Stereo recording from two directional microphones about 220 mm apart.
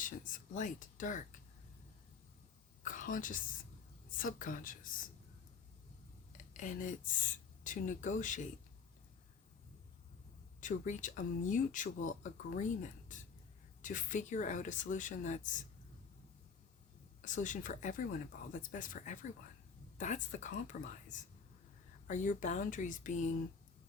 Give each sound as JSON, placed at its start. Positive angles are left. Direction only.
{"t": 0.0, "sound": "speech", "side_deg": 35}
{"t": 2.8, "sound": "a woman's voice", "side_deg": 35}
{"t": 6.3, "sound": "speech", "side_deg": 35}
{"t": 10.6, "sound": "speech", "side_deg": 35}
{"t": 17.2, "sound": "speech", "side_deg": 35}